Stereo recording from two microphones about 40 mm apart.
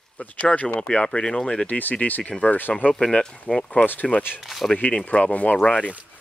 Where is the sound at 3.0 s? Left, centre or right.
Left.